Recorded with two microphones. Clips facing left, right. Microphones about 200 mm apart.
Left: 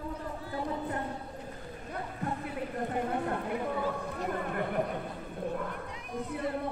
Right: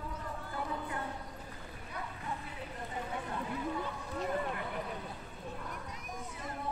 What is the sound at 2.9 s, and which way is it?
Speech, 60° left (ahead or behind).